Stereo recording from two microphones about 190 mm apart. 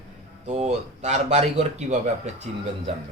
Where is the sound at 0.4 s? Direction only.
35° right (ahead or behind).